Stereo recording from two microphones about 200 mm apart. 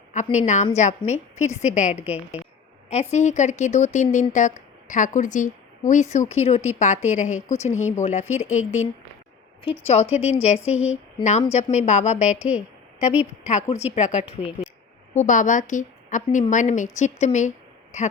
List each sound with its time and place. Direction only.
0.1 s a woman's voice: 35° left (ahead or behind)
2.0 s a woman's voice: 5° right (ahead or behind)
2.9 s a woman's voice: 35° left (ahead or behind)
13.5 s a woman's voice: 35° left (ahead or behind)